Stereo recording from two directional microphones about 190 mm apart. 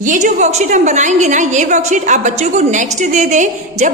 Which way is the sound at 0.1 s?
40° right (ahead or behind).